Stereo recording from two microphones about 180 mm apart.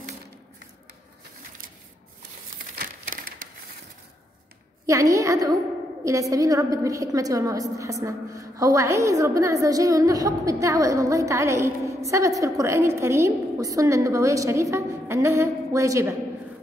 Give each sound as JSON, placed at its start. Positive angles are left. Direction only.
{"t": 2.7, "sound": "crushing", "side_deg": -55}
{"t": 4.8, "sound": "a woman's voice", "side_deg": -15}